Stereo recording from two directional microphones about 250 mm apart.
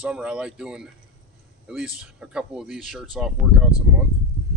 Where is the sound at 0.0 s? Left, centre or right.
Centre.